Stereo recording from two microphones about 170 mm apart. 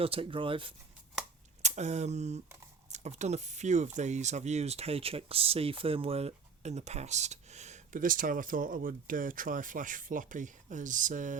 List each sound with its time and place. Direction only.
0.0 s speech: 35° right (ahead or behind)
1.6 s speech: 40° right (ahead or behind)